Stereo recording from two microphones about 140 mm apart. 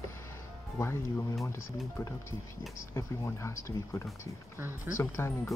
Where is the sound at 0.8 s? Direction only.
20° left (ahead or behind).